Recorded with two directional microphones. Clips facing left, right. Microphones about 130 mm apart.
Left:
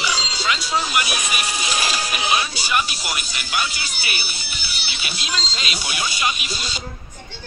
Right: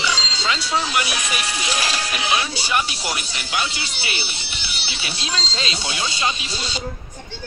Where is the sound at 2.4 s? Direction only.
30° right (ahead or behind).